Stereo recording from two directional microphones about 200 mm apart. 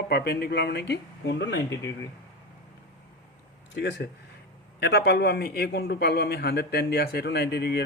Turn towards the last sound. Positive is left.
turn(degrees=55)  # may be behind; listen again after turning